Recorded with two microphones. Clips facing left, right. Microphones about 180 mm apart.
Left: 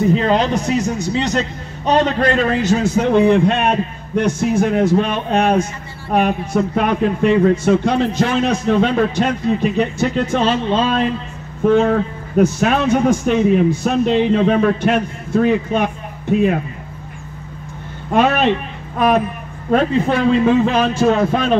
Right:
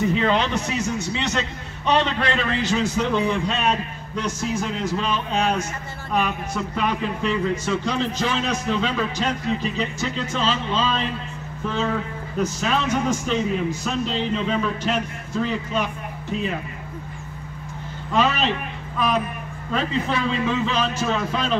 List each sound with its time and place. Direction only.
0.0 s a man's voice: 40° left (ahead or behind); by 16.5 s 55° left (ahead or behind)
18.1 s a man's voice: 55° left (ahead or behind)